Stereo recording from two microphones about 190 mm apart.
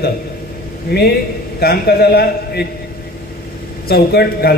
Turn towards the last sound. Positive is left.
turn(degrees=55)  # may be behind; listen again after turning